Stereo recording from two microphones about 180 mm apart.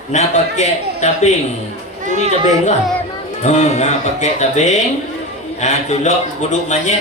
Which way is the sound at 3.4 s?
40° left (ahead or behind).